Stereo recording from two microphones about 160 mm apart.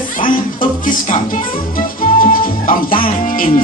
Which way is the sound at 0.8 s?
55° left (ahead or behind).